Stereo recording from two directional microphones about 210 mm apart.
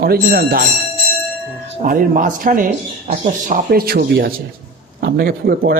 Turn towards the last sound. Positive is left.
turn(degrees=-45)  # may be behind; listen again after turning